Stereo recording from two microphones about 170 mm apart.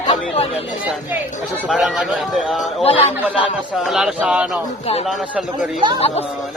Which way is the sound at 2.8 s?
35° left (ahead or behind).